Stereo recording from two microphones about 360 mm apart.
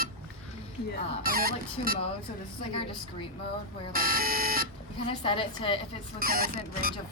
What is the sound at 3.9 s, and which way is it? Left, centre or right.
Speech, right.